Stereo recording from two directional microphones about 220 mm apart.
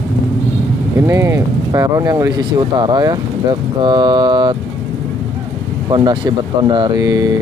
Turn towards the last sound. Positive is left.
turn(degrees=-15)  # may be behind; listen again after turning